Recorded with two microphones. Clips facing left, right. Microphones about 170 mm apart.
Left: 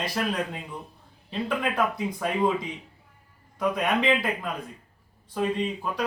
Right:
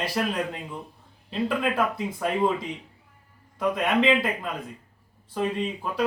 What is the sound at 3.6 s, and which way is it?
Speech, centre (ahead or behind).